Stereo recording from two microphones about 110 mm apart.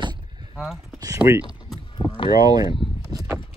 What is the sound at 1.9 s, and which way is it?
Vehicle, 50° left (ahead or behind).